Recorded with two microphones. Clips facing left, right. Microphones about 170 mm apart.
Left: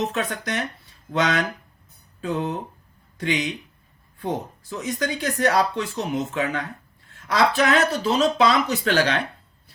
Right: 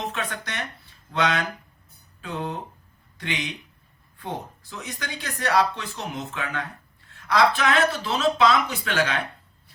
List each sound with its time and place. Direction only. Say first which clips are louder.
0.0 s speech: left 5 dB; 40° left (ahead or behind)